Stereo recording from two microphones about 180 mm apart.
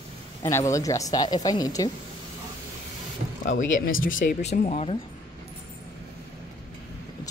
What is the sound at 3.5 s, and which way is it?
Speech, 45° left (ahead or behind).